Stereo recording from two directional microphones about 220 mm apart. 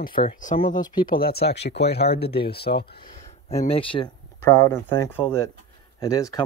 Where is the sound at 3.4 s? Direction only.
25° left (ahead or behind).